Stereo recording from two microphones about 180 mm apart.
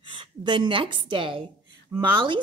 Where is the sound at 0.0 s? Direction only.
25° right (ahead or behind).